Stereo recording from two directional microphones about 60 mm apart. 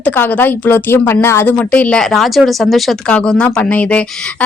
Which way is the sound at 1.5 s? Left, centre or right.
Left.